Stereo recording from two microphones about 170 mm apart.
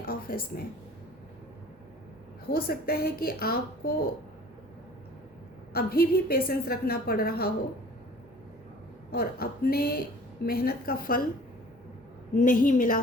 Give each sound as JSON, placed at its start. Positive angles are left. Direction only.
{"t": 0.0, "sound": "a sound", "side_deg": 60}
{"t": 2.5, "sound": "a woman's voice", "side_deg": 60}
{"t": 5.7, "sound": "a woman's voice", "side_deg": 65}
{"t": 9.1, "sound": "a woman's voice", "side_deg": 60}
{"t": 12.4, "sound": "a woman's voice", "side_deg": 50}